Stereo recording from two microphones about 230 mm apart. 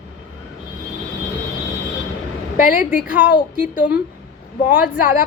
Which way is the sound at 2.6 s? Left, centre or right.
Left.